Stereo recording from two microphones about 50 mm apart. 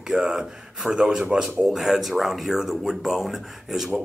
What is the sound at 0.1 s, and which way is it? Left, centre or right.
Speech, centre.